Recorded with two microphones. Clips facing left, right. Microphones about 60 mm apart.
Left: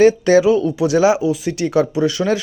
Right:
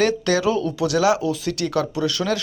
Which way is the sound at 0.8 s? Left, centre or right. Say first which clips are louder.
Left 4 dB; left.